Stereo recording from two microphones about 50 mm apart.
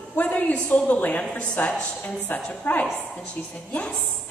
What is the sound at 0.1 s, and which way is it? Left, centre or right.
A woman's voice, left.